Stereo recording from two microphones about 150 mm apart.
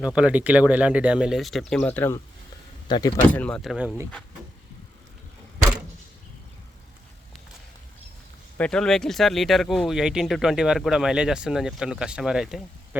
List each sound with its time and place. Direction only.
0.0 s speech: 5° right (ahead or behind); by 2.2 s 15° left (ahead or behind)
2.8 s speech: 30° left (ahead or behind)
3.3 s speech: 10° left (ahead or behind)
3.6 s speech: 5° right (ahead or behind)
8.5 s speech: 5° left (ahead or behind)